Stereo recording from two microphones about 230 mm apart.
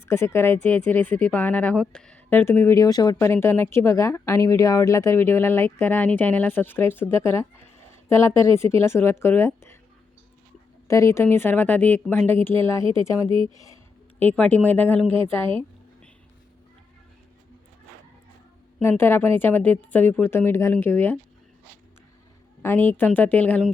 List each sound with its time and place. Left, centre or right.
0.0 s speech: centre
10.8 s speech: centre
18.8 s speech: centre
22.6 s speech: centre